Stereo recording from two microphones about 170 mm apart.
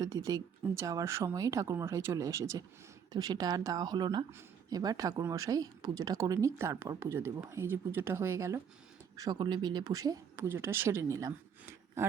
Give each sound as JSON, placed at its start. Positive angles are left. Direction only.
{"t": 0.0, "sound": "speech", "side_deg": -20}